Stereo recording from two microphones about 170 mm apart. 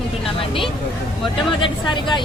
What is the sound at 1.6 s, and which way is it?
Speech, 25° left (ahead or behind).